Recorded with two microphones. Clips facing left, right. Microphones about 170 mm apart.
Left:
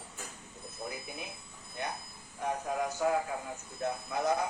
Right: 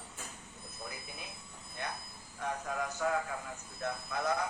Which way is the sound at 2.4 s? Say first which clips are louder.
Left 4 dB; 25° left (ahead or behind).